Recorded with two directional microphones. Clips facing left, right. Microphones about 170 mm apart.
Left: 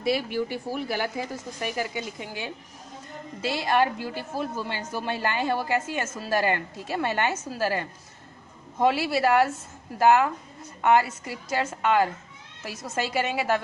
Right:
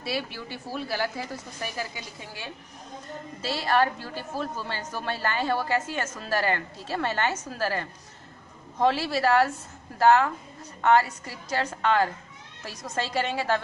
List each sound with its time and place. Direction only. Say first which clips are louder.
0.0 s a woman's voice: left 7 dB; 15° left (ahead or behind)